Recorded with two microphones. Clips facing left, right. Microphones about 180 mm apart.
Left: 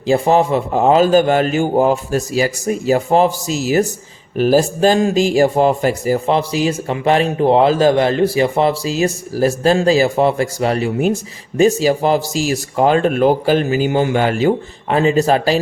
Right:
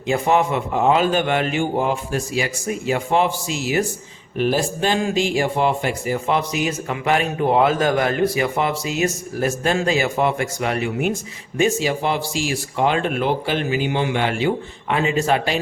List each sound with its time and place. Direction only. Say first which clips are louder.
0.1 s a man's voice: left 5 dB; 35° left (ahead or behind)